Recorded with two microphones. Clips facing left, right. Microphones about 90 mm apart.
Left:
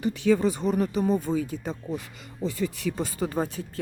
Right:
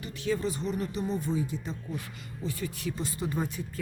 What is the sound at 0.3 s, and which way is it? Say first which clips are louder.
Speech: left 7 dB; 50° left (ahead or behind).